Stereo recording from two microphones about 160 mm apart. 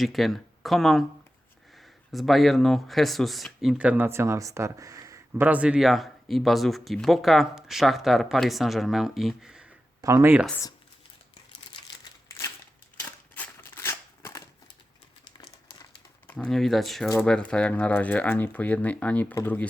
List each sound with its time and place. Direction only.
0.0 s speech: centre (ahead or behind)
10.0 s speech: 20° right (ahead or behind)
13.3 s a sound: 10° left (ahead or behind)
15.4 s crumpling: 25° left (ahead or behind)
16.2 s speech: 10° left (ahead or behind)